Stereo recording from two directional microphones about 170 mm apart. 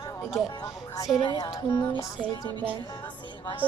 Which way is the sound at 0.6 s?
20° left (ahead or behind).